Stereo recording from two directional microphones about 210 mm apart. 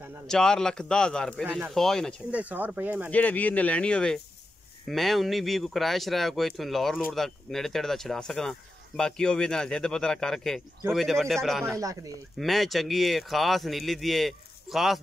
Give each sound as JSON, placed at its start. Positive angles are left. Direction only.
{"t": 0.3, "sound": "speech", "side_deg": 5}
{"t": 1.4, "sound": "speech", "side_deg": -5}
{"t": 3.1, "sound": "speech", "side_deg": 5}
{"t": 11.6, "sound": "speech", "side_deg": -15}
{"t": 12.4, "sound": "speech", "side_deg": 0}